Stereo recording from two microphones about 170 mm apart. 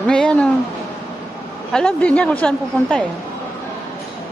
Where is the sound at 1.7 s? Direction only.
5° left (ahead or behind).